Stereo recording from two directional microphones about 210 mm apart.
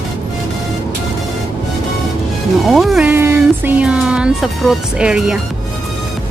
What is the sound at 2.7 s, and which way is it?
Speech, centre (ahead or behind).